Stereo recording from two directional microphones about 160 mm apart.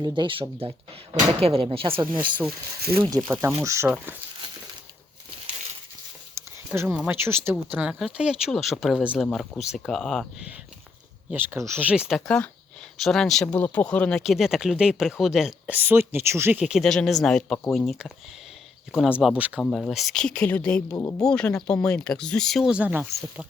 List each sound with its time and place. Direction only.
0.0 s speech: 30° right (ahead or behind)
1.9 s speech: 15° right (ahead or behind)
3.8 s speech: 5° right (ahead or behind)
6.3 s a sound: 15° right (ahead or behind)
7.1 s speech: 15° right (ahead or behind); by 10.2 s centre (ahead or behind)
11.3 s speech: 10° right (ahead or behind)
19.5 s speech: 5° left (ahead or behind)
20.9 s speech: 20° left (ahead or behind)
21.2 s speech: 5° left (ahead or behind)